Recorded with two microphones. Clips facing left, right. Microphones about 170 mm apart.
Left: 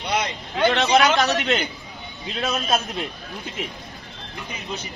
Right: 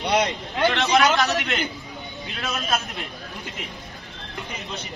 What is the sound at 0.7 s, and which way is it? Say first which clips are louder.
Speech: left 2 dB; 20° left (ahead or behind).